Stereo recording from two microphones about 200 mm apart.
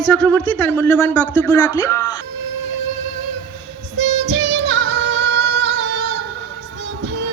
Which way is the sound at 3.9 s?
65° right (ahead or behind).